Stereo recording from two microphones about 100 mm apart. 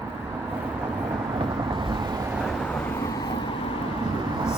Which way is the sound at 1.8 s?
50° right (ahead or behind).